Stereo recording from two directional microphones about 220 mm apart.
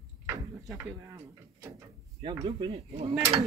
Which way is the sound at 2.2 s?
20° right (ahead or behind).